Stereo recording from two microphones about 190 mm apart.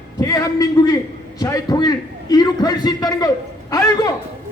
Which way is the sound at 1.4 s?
20° left (ahead or behind).